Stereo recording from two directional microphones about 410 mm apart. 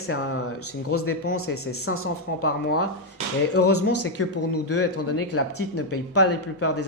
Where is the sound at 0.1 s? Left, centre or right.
Left.